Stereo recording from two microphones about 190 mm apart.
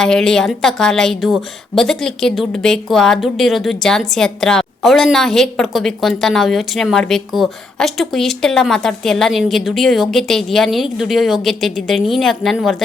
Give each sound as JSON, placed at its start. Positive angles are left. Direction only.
{"t": 0.0, "sound": "a woman's voice", "side_deg": 5}